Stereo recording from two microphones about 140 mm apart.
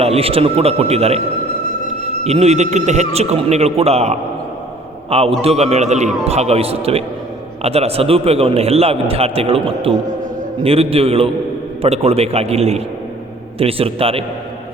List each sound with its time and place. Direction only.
0.0 s a man's voice: 45° right (ahead or behind)
2.2 s a man's voice: 50° right (ahead or behind)